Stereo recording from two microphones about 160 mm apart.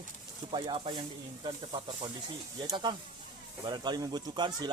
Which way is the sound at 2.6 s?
30° right (ahead or behind).